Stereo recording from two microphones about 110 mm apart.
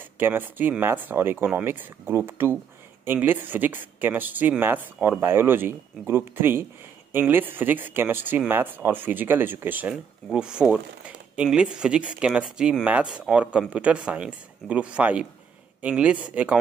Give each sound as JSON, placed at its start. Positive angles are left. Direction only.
{"t": 0.2, "sound": "speech", "side_deg": -20}